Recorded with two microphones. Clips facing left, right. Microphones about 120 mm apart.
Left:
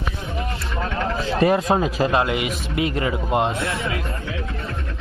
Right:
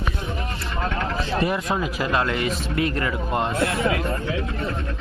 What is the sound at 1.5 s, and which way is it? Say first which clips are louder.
Speech: left 5 dB; 30° left (ahead or behind).